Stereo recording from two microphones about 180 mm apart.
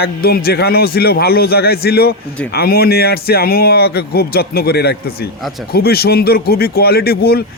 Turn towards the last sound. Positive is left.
turn(degrees=60)  # may be behind; listen again after turning